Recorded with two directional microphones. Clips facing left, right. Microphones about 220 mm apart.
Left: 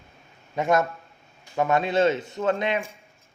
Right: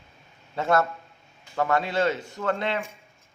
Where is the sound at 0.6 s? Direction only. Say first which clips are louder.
Left 1 dB; 15° left (ahead or behind).